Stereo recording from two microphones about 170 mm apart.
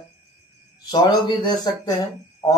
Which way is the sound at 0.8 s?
25° left (ahead or behind).